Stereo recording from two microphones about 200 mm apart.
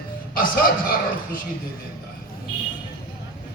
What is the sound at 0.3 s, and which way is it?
A man's voice, 45° left (ahead or behind).